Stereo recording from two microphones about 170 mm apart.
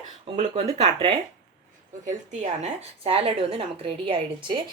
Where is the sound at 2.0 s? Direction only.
40° right (ahead or behind).